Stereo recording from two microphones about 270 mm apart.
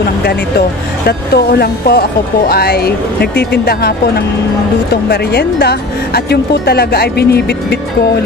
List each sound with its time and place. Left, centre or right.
0.0 s speech: left